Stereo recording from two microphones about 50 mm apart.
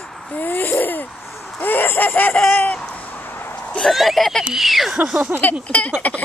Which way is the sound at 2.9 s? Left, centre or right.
Left.